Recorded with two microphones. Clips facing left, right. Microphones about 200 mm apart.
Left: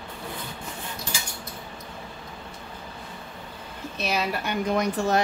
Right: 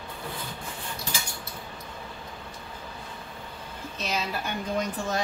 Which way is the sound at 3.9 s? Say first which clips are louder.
Left 4 dB; 65° left (ahead or behind).